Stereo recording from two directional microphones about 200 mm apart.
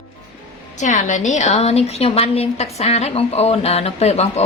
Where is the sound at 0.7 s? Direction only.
40° left (ahead or behind).